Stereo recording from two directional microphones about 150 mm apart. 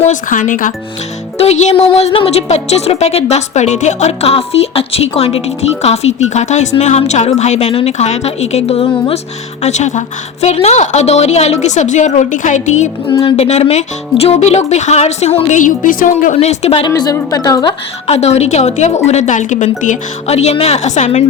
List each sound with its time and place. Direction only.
0.0 s speech: 60° left (ahead or behind)
1.4 s a woman's voice: 50° left (ahead or behind)
9.6 s a woman's voice: 50° left (ahead or behind)
15.6 s speech: 65° left (ahead or behind)
16.3 s a woman's voice: 45° left (ahead or behind)
16.8 s a woman's voice: 25° left (ahead or behind)
18.0 s a woman's voice: 45° left (ahead or behind)